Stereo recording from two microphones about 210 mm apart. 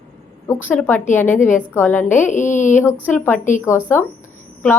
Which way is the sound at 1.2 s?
35° left (ahead or behind).